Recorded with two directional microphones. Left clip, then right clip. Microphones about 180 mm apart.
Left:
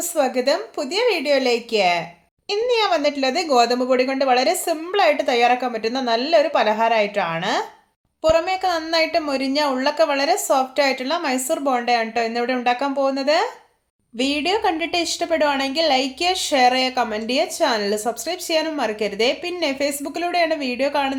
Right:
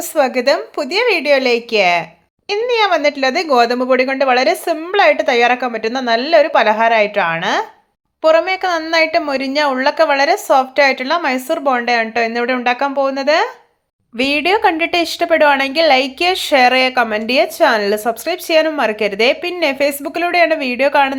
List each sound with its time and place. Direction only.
0.2 s a woman's voice: 15° right (ahead or behind)